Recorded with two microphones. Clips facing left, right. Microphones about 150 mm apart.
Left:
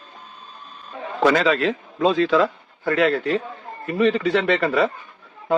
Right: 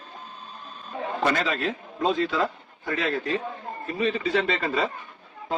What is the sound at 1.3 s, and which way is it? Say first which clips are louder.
A man's voice: left 8 dB; 90° left.